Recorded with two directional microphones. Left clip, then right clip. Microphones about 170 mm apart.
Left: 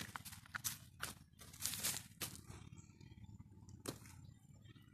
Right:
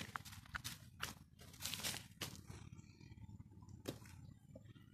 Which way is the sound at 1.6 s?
20° left (ahead or behind).